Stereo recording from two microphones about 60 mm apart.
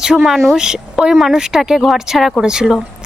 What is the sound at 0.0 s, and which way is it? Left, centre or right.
Speech, centre.